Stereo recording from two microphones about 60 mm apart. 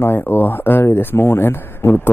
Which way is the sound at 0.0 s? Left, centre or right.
Left.